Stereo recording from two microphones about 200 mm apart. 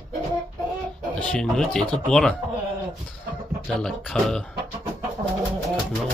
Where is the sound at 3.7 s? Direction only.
Centre (ahead or behind).